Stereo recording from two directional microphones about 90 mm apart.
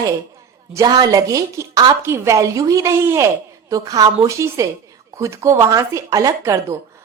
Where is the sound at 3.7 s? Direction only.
40° right (ahead or behind).